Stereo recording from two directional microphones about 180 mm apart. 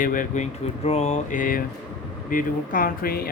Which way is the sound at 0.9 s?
40° left (ahead or behind).